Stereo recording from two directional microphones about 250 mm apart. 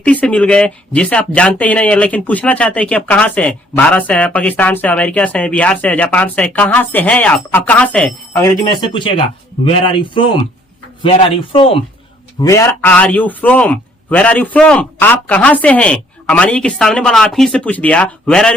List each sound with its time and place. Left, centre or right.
0.0 s a man's voice: centre